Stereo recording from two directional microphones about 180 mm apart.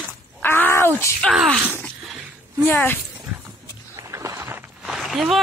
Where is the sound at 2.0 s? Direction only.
Centre (ahead or behind).